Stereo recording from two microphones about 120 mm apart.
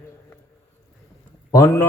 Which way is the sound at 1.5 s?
25° left (ahead or behind).